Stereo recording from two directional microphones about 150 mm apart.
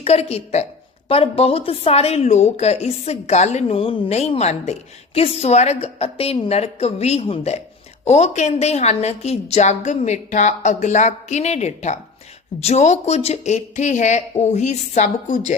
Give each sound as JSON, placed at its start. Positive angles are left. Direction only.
{"t": 0.0, "sound": "a woman's voice", "side_deg": 45}